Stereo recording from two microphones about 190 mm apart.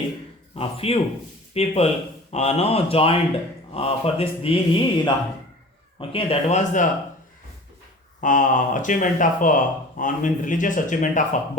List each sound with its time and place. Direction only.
0.5 s speech: 30° left (ahead or behind)
3.7 s mantra: 30° left (ahead or behind)
6.0 s speech: 30° left (ahead or behind)
8.2 s speech: 45° left (ahead or behind)